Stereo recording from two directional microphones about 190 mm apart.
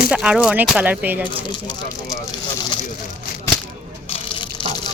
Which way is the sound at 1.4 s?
25° left (ahead or behind).